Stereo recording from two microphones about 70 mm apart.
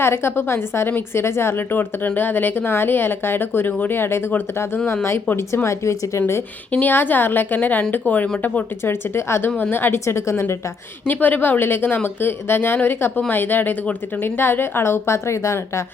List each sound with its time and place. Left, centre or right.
0.0 s a woman's voice: left
6.7 s a woman's voice: left
8.8 s a woman's voice: left
11.0 s a woman's voice: left